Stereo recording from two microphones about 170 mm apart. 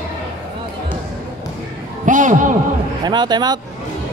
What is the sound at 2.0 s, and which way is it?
Speech, 50° right (ahead or behind).